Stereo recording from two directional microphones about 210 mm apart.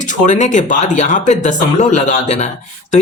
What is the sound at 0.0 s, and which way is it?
Speech, 35° left (ahead or behind).